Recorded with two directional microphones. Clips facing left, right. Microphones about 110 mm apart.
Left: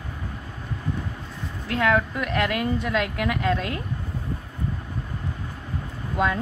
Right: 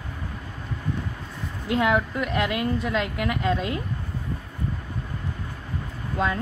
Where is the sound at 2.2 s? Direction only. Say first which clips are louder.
Even; 5° right (ahead or behind).